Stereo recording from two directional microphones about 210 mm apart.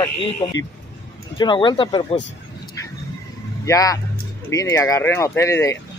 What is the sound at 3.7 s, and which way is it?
Speech, 15° left (ahead or behind).